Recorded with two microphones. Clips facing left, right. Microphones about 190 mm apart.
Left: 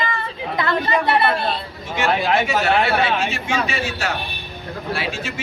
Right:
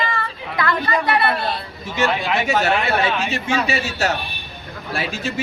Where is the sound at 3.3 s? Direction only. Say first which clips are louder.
Right 2 dB; 40° right (ahead or behind).